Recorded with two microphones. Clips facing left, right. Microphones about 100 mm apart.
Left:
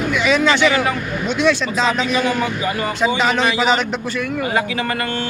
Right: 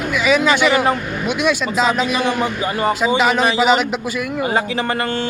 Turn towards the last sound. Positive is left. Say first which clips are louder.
# right 2 dB
turn(degrees=-5)  # may be behind; listen again after turning